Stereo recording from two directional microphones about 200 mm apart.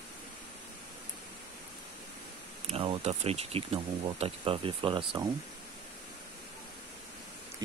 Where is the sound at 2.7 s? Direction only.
30° right (ahead or behind).